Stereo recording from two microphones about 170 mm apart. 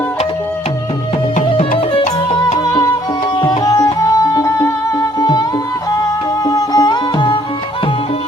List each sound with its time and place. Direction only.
3.3 s music: 25° left (ahead or behind)